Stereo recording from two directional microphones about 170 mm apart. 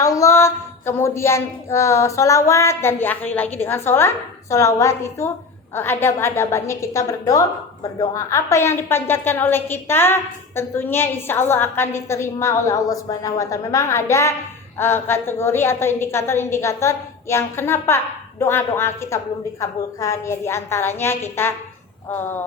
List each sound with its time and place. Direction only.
0.0 s a woman's voice: 20° left (ahead or behind)